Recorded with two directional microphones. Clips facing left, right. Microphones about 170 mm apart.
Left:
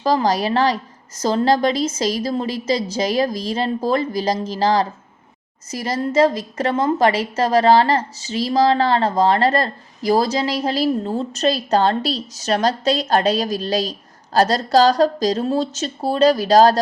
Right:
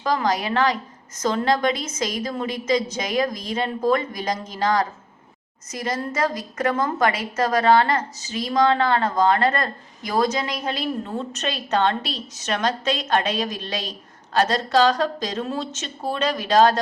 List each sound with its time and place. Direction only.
0.0 s a woman's voice: 35° left (ahead or behind)